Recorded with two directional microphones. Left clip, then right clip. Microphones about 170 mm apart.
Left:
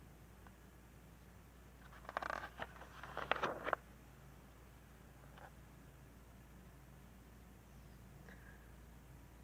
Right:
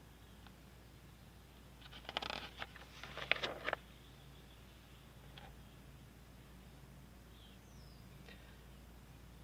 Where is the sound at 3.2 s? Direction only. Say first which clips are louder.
Right 1 dB; centre (ahead or behind).